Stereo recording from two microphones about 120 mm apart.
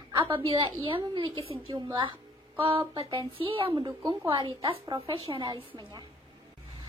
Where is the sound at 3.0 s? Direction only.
45° right (ahead or behind).